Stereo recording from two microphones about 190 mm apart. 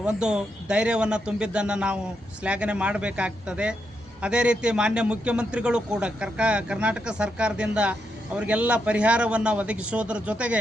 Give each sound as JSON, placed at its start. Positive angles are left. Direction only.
{"t": 0.0, "sound": "a man's voice", "side_deg": -5}